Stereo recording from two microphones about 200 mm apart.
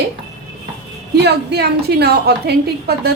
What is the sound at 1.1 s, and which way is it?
A woman's voice, 55° right (ahead or behind).